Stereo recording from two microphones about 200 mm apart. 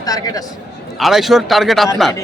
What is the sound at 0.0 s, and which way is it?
Speech, 20° left (ahead or behind).